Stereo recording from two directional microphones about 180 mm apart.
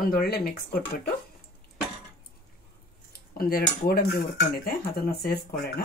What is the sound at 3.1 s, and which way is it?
Speech, 55° left (ahead or behind).